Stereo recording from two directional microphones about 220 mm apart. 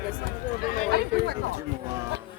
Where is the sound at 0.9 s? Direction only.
50° right (ahead or behind).